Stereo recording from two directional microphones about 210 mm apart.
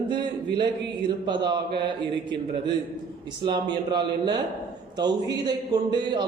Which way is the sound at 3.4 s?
20° right (ahead or behind).